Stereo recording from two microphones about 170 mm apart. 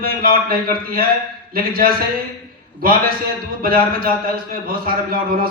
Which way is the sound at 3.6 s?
60° right (ahead or behind).